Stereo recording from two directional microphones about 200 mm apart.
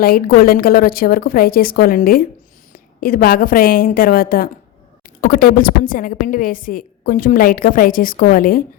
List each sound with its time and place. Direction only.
0.0 s a woman's voice: 50° left (ahead or behind)